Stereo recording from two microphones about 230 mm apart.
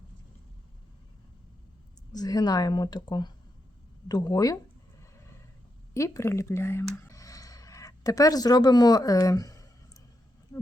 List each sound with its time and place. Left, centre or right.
2.1 s speech: centre
5.9 s speech: centre
6.8 s a sound: centre